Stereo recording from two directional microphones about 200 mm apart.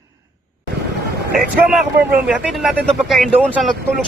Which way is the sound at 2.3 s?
Centre (ahead or behind).